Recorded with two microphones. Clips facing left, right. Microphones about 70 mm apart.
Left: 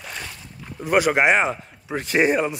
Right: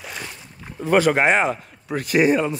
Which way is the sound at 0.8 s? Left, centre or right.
Centre.